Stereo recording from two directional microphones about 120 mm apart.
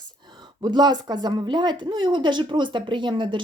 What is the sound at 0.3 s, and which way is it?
A woman's voice, 40° right (ahead or behind).